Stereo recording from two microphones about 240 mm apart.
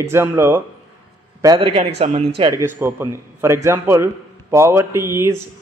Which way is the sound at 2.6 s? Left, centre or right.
Centre.